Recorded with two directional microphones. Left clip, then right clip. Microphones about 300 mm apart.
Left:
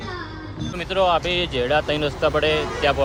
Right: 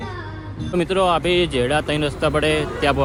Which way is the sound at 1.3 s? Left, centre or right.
Right.